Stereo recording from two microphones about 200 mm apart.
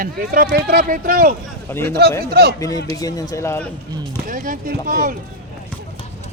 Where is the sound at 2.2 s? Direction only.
50° right (ahead or behind).